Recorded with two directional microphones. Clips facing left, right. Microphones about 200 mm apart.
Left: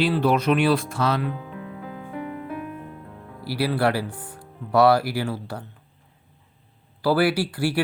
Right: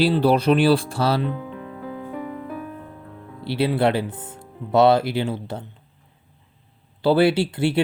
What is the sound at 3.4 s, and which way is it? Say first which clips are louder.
Speech: right 3 dB; 25° right (ahead or behind).